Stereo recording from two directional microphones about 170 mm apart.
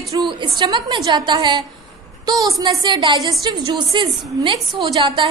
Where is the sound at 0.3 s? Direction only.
30° right (ahead or behind).